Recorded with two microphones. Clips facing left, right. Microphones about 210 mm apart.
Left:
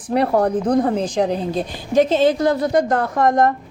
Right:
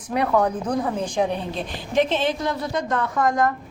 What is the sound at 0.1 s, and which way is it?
A woman's voice, 35° left (ahead or behind).